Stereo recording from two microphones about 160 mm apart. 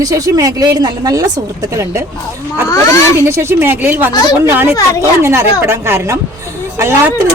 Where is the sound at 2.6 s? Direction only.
20° left (ahead or behind).